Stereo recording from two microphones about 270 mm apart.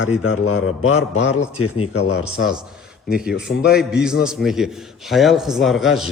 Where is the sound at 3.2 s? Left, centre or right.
Centre.